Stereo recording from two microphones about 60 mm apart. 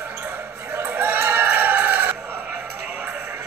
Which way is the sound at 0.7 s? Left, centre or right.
Right.